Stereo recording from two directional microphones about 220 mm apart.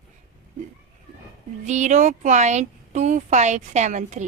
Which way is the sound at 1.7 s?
30° right (ahead or behind).